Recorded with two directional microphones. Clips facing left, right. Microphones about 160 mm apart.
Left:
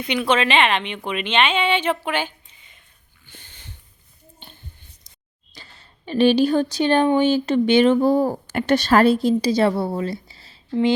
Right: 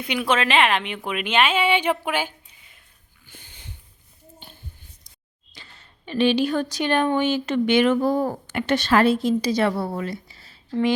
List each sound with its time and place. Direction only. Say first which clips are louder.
0.0 s a woman's voice: left 2 dB; 5° right (ahead or behind)
3.2 s a sound: even; 10° right (ahead or behind)
5.5 s speech: left 2 dB; 35° left (ahead or behind)